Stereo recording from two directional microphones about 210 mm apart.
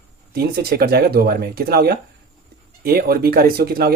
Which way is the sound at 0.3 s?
50° right (ahead or behind).